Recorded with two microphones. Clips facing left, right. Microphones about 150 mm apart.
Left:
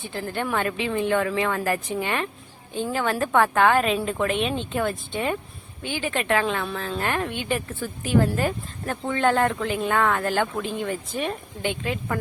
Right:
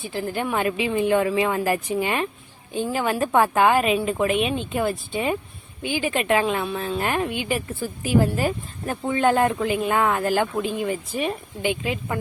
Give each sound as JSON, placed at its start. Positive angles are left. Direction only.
{"t": 0.0, "sound": "speech", "side_deg": -10}